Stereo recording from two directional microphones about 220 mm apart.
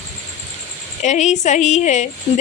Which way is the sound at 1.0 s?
35° left (ahead or behind).